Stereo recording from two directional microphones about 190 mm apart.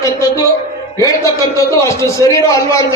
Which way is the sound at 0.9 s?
15° left (ahead or behind).